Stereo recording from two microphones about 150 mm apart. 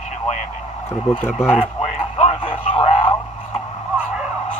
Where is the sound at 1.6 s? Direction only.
45° left (ahead or behind).